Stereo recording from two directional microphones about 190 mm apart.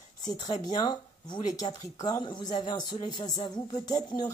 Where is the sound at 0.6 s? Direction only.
20° left (ahead or behind).